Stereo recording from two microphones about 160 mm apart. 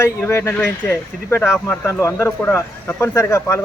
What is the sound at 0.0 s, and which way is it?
Speech, 15° left (ahead or behind).